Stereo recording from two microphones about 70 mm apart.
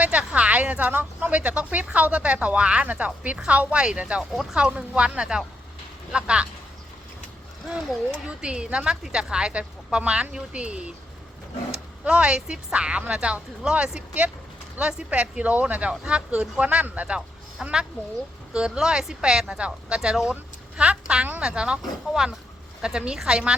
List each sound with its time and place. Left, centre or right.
0.0 s a sound: centre
0.3 s a woman's voice: centre
4.2 s speech: centre
4.5 s speech: centre
8.3 s speech: centre
12.0 s speech: centre
17.2 s a sound: centre
18.5 s speech: centre